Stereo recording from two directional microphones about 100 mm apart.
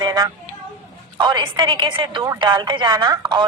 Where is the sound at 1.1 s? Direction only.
50° right (ahead or behind).